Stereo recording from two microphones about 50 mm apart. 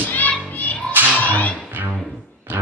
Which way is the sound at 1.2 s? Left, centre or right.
Left.